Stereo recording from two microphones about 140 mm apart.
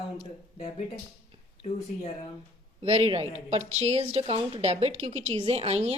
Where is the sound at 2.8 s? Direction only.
45° right (ahead or behind).